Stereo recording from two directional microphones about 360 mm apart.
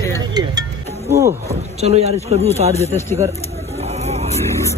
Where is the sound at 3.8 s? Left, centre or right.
Centre.